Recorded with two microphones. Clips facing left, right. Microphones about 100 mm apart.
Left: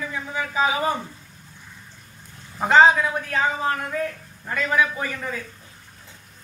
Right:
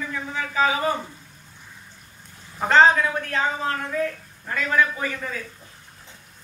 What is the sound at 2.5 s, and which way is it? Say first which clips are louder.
A man's voice: left 1 dB; 10° left (ahead or behind).